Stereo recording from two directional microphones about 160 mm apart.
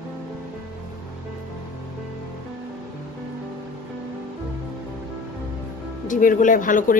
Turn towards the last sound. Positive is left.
turn(degrees=55)  # may be behind; listen again after turning